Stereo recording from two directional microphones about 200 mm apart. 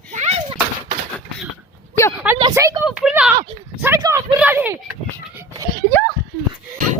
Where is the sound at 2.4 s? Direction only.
20° right (ahead or behind).